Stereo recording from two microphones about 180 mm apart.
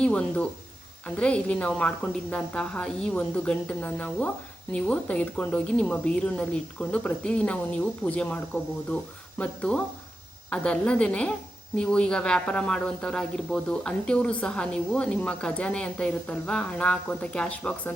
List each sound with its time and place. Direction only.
0.0 s speech: 5° left (ahead or behind)
9.4 s a woman's voice: 5° left (ahead or behind)